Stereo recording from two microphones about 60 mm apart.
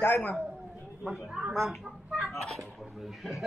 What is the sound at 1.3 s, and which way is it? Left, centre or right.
Speech, centre.